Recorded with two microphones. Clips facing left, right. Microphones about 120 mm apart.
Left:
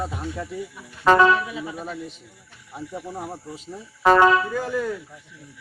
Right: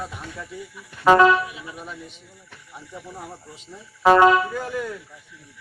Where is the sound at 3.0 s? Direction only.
20° left (ahead or behind).